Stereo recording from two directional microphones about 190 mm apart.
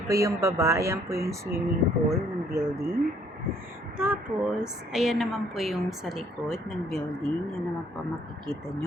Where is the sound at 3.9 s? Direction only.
10° right (ahead or behind).